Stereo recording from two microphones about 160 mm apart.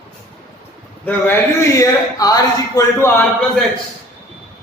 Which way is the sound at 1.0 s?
15° left (ahead or behind).